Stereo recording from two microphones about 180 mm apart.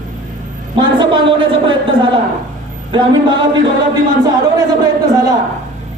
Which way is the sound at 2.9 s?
25° right (ahead or behind).